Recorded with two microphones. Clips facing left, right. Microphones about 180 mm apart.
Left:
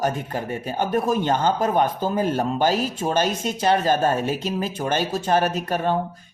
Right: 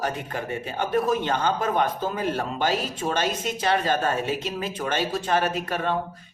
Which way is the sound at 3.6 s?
45° left (ahead or behind).